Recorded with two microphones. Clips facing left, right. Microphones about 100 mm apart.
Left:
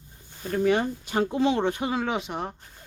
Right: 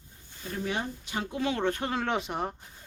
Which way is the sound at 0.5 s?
60° left (ahead or behind).